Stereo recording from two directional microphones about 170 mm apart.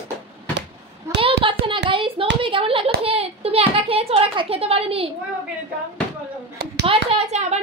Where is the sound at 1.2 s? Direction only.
30° right (ahead or behind).